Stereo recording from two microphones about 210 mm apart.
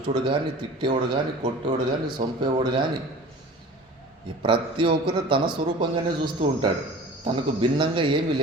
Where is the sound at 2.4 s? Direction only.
20° right (ahead or behind).